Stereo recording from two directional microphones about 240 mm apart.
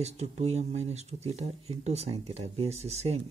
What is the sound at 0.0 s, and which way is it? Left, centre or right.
Speech, right.